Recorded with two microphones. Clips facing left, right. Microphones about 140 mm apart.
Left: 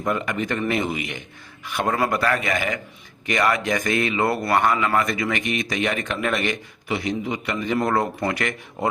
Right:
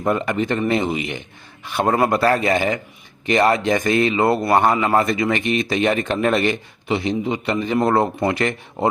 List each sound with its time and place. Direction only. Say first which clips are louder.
0.0 s speech: right 4 dB; 30° right (ahead or behind)